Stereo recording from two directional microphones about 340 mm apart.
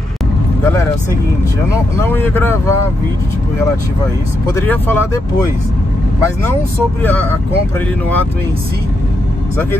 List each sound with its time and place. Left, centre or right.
2.0 s speech: centre
4.6 s speech: centre
7.0 s speech: centre